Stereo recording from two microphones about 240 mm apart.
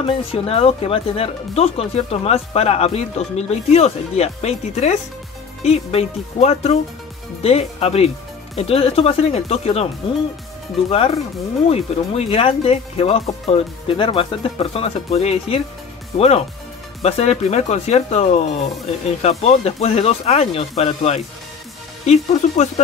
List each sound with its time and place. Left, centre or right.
0.0 s speech: left
10.9 s speech: left